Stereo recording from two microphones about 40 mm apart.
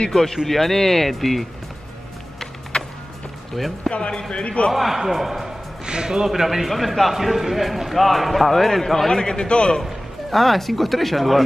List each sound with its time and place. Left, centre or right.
0.1 s a man's voice: centre
2.7 s music: centre
3.5 s a man's voice: centre
3.9 s a man's voice: left
4.7 s a man's voice: centre
5.9 s a man's voice: centre
9.1 s a man's voice: centre
10.3 s a man's voice: centre